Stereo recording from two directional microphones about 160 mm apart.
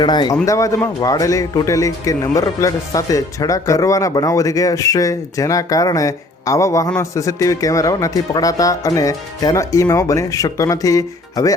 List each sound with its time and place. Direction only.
0.0 s a man's voice: 25° left (ahead or behind)